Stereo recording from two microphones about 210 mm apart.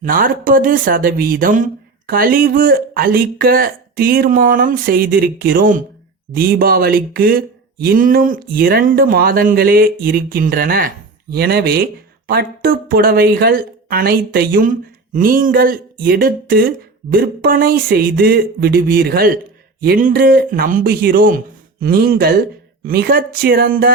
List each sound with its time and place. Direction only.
0.0 s speech: 40° right (ahead or behind)